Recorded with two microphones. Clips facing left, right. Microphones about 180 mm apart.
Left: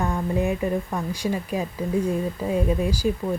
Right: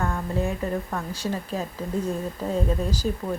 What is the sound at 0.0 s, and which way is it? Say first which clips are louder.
Speech: left 3 dB; 15° left (ahead or behind).